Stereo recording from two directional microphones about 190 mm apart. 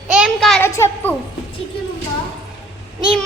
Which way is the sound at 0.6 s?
10° left (ahead or behind).